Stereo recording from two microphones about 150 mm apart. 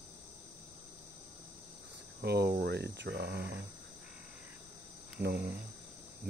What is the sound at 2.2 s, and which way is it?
Cricket, 90° right.